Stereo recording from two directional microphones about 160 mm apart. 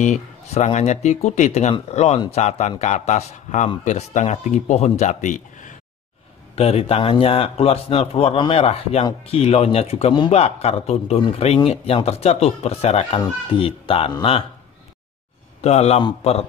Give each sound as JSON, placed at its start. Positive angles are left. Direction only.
{"t": 0.0, "sound": "a man's voice", "side_deg": 45}
{"t": 6.5, "sound": "a man's voice", "side_deg": 40}
{"t": 15.6, "sound": "a man's voice", "side_deg": 40}